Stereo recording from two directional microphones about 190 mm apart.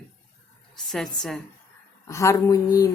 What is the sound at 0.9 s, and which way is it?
Speech, centre (ahead or behind).